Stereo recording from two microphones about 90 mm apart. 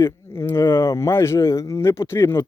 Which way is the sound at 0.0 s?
30° left (ahead or behind).